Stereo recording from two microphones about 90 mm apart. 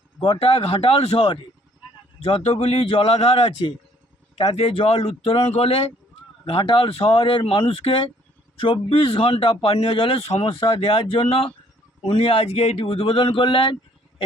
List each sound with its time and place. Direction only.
0.2 s speech: 90° left